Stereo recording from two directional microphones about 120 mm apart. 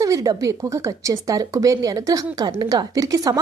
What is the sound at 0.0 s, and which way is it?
A woman's voice, 30° right (ahead or behind).